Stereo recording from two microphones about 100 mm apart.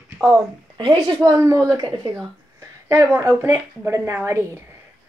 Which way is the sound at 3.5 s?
25° right (ahead or behind).